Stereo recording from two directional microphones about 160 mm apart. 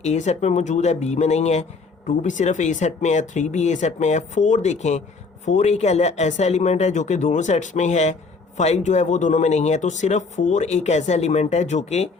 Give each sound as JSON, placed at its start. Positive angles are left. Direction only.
{"t": 0.0, "sound": "speech", "side_deg": 45}